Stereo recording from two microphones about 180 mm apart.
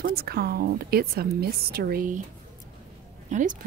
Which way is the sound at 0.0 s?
55° right (ahead or behind).